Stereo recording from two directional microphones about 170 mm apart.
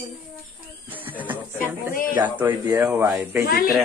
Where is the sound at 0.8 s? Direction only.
10° right (ahead or behind).